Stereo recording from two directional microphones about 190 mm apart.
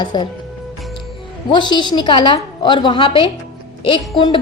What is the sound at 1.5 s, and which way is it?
A woman's voice, 25° left (ahead or behind).